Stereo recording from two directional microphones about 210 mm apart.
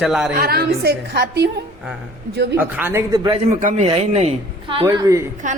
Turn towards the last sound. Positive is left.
turn(degrees=-35)  # may be behind; listen again after turning